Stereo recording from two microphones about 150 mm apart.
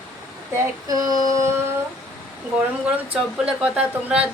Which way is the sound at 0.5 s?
25° right (ahead or behind).